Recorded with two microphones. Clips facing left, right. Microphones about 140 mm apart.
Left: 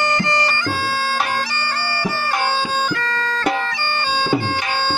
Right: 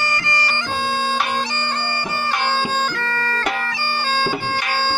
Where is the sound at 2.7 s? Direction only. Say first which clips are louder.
Left 1 dB; 10° left (ahead or behind).